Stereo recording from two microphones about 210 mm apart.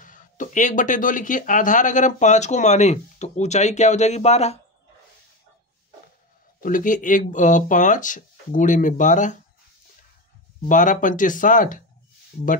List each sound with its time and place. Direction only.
0.0 s speech: 40° left (ahead or behind)
6.6 s speech: 40° left (ahead or behind)
10.7 s speech: 40° left (ahead or behind)